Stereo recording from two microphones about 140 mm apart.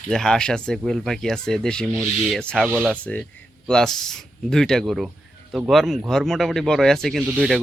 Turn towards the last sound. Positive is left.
turn(degrees=0)  # may be behind; listen again after turning